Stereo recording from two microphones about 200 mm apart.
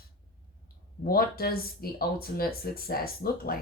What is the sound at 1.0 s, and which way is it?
Speech, 50° left (ahead or behind).